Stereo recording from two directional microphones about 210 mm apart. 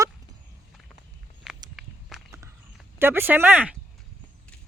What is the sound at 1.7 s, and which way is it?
Walk, centre (ahead or behind).